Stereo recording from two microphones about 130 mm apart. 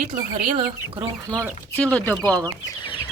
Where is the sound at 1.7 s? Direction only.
10° left (ahead or behind).